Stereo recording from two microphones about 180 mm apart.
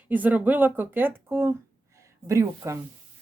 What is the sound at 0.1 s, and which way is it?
Speech, 10° right (ahead or behind).